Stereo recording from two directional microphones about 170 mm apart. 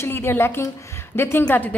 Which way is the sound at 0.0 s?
15° left (ahead or behind).